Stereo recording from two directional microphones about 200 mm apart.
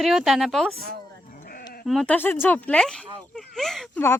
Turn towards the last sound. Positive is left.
turn(degrees=0)  # may be behind; listen again after turning